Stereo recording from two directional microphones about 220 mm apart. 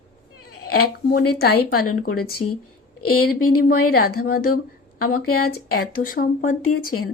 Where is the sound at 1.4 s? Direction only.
40° left (ahead or behind).